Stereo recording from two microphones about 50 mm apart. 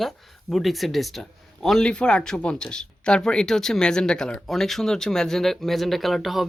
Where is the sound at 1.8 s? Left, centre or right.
Centre.